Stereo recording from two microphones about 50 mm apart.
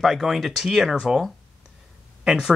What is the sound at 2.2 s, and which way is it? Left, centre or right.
Speech, centre.